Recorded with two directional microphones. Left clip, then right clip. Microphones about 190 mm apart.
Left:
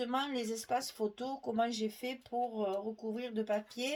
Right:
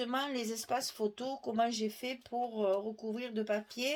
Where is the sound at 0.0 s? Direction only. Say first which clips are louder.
Even; 40° right (ahead or behind).